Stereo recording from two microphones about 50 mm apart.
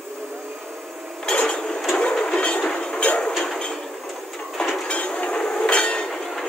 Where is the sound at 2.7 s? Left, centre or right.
Centre.